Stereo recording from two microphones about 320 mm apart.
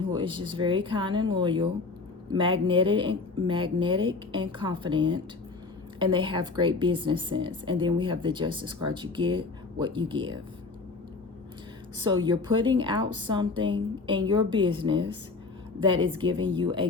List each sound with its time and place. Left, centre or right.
0.0 s speech: centre
12.2 s speech: centre